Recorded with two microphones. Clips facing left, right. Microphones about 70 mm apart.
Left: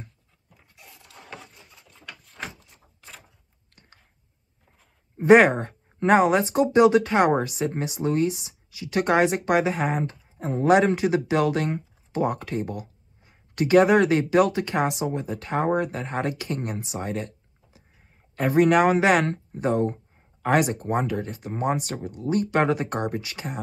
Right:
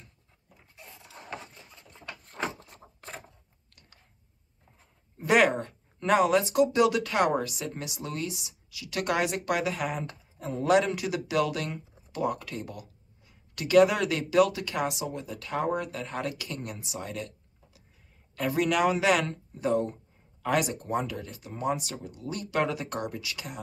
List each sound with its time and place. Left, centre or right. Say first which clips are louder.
0.7 s vehicle: right 1 dB; centre
1.3 s a sound: right 2 dB; centre
2.2 s door: right 4 dB; right
2.8 s a sound: right 3 dB; right
5.1 s speech: left 8 dB; left
18.3 s speech: left 8 dB; left